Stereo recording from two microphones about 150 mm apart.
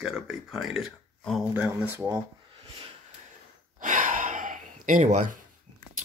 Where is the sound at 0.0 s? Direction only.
Centre (ahead or behind).